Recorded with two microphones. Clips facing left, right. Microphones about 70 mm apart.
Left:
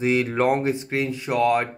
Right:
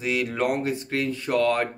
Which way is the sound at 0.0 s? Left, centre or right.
Left.